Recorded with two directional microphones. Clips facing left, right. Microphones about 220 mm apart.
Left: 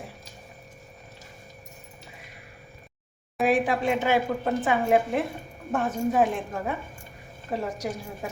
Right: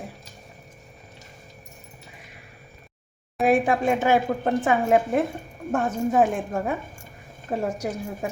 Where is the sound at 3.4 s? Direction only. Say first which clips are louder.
Right 3 dB; 45° right (ahead or behind).